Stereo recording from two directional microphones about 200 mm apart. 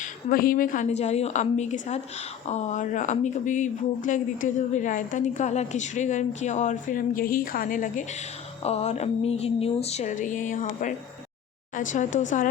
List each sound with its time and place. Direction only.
0.0 s speech: 45° left (ahead or behind)